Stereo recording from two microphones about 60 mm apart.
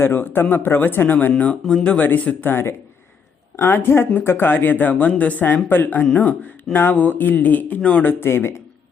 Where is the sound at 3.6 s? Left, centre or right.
Left.